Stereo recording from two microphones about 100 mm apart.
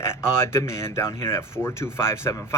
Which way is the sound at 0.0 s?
25° left (ahead or behind).